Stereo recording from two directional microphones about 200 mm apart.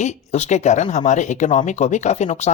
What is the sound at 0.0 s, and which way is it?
Speech, 35° left (ahead or behind).